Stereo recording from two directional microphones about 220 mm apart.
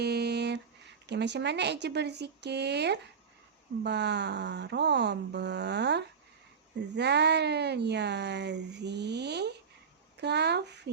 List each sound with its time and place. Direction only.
0.0 s speech: 50° right (ahead or behind)